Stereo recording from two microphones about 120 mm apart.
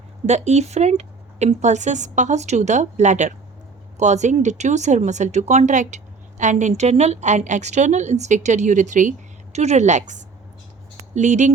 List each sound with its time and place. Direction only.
0.3 s speech: 70° right (ahead or behind)